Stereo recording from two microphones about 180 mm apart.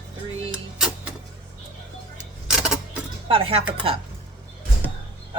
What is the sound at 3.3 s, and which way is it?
Speech, 30° right (ahead or behind).